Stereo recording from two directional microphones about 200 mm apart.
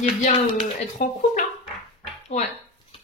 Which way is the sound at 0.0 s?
35° left (ahead or behind).